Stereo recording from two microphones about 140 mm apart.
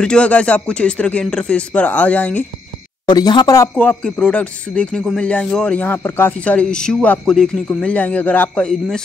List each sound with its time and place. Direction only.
0.0 s speech: 5° left (ahead or behind)
3.1 s speech: 30° left (ahead or behind)
3.7 s speech: 10° left (ahead or behind)